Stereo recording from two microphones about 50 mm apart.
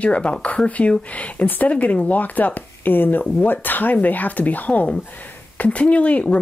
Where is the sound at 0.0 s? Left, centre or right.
Left.